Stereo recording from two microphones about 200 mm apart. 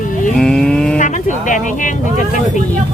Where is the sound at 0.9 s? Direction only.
40° left (ahead or behind).